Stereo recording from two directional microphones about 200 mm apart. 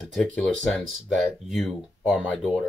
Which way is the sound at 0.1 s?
5° left (ahead or behind).